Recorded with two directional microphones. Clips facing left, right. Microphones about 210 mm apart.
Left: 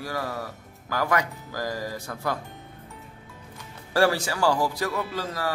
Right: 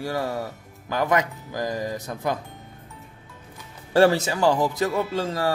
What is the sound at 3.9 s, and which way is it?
Speech, 25° right (ahead or behind).